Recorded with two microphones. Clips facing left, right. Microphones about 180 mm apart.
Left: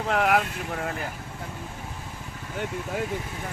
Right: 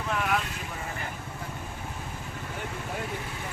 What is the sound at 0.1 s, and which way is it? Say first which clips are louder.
Speech: left 6 dB; 75° left (ahead or behind).